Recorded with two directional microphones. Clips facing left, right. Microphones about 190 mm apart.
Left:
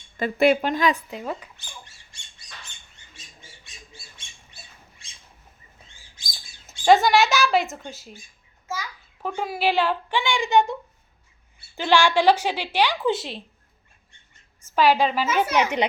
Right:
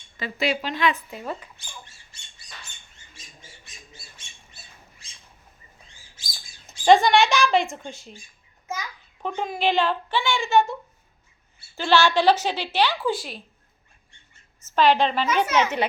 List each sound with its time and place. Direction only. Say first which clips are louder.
0.2 s a woman's voice: left 7 dB; 55° left (ahead or behind)
1.2 s a woman's voice: left 1 dB; 10° left (ahead or behind)
6.7 s speech: even; centre (ahead or behind)
8.6 s a sound: even; 20° right (ahead or behind)
9.2 s a woman's voice: even; 5° left (ahead or behind)
11.8 s a woman's voice: even; 15° left (ahead or behind)
14.6 s a woman's voice: even; 10° left (ahead or behind)